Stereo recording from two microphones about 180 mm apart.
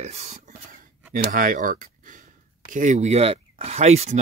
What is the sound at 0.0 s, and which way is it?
Whispering, 40° right (ahead or behind).